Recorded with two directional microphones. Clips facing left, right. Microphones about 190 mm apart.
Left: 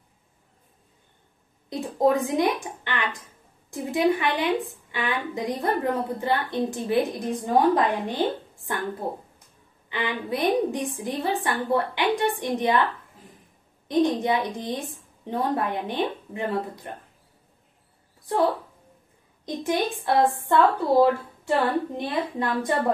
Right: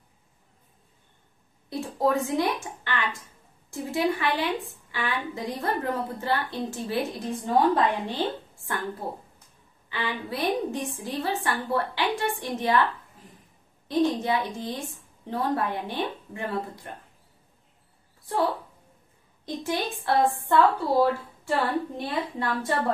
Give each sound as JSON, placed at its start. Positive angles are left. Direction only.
{"t": 1.7, "sound": "a woman's voice", "side_deg": 20}
{"t": 9.8, "sound": "a woman's voice", "side_deg": 20}
{"t": 13.8, "sound": "a woman's voice", "side_deg": 15}
{"t": 19.4, "sound": "a woman's voice", "side_deg": 20}